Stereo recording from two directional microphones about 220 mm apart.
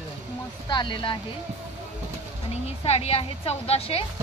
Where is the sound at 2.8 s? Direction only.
25° left (ahead or behind).